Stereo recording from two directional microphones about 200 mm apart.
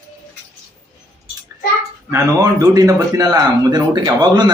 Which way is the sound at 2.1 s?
15° right (ahead or behind).